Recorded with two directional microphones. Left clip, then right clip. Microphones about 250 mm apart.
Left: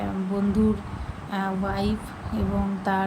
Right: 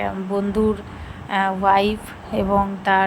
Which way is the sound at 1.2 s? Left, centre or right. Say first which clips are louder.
Right 11 dB; centre.